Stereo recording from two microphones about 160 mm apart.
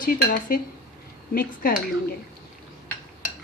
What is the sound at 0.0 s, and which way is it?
A woman's voice, 60° left (ahead or behind).